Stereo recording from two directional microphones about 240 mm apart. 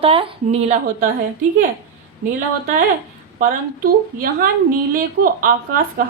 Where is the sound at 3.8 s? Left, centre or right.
Right.